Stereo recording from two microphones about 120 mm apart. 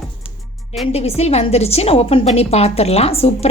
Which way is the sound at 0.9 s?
60° left (ahead or behind).